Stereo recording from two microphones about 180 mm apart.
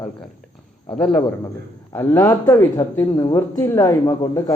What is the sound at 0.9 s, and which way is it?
Speech, centre (ahead or behind).